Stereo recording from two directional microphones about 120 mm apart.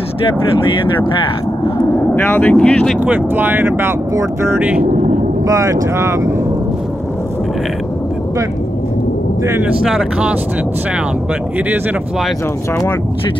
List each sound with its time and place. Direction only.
2.2 s speech: 15° left (ahead or behind)
3.0 s speech: 15° right (ahead or behind)
5.5 s speech: 25° right (ahead or behind)
9.5 s speech: 10° right (ahead or behind)